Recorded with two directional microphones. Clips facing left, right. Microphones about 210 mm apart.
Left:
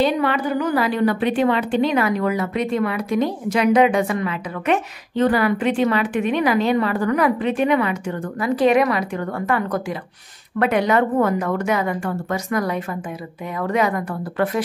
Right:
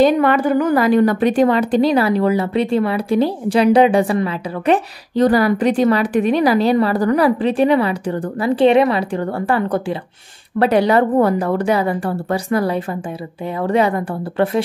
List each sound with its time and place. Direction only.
0.0 s a woman's voice: 50° right (ahead or behind); by 14.6 s 30° right (ahead or behind)